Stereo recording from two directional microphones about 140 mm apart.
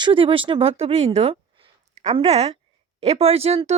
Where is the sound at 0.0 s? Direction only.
40° right (ahead or behind).